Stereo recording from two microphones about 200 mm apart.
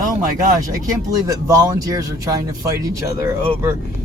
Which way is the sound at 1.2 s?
15° right (ahead or behind).